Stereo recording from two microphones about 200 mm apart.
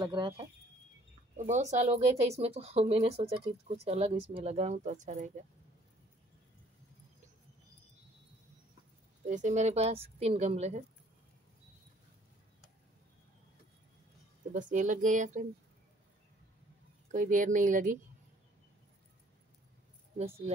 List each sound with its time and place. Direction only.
0.0 s speech: 20° right (ahead or behind)
1.3 s speech: 35° right (ahead or behind)
9.2 s speech: 35° right (ahead or behind)
14.5 s speech: 40° right (ahead or behind)
17.1 s speech: 40° right (ahead or behind)
20.2 s speech: 30° right (ahead or behind)